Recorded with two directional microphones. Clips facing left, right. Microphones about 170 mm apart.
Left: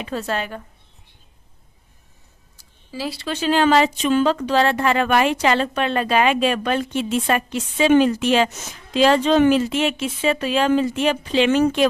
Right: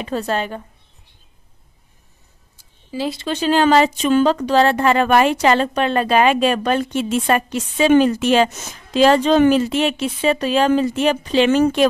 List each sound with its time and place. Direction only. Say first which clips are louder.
0.0 s speech: right 3 dB; 30° right (ahead or behind)
2.9 s speech: right 4 dB; 20° right (ahead or behind)
3.3 s speech: right 2 dB; 40° right (ahead or behind)